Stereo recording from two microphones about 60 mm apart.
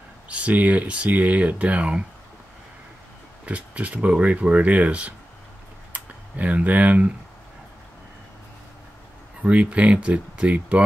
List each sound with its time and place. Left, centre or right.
0.3 s speech: right
3.4 s speech: right
9.4 s speech: centre